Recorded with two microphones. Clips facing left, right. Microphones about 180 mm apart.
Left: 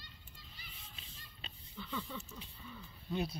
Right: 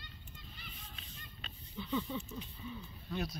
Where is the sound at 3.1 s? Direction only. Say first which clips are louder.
Left 2 dB; 25° left (ahead or behind).